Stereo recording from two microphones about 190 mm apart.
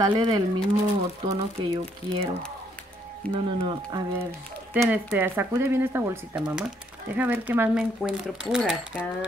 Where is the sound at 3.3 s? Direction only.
25° right (ahead or behind).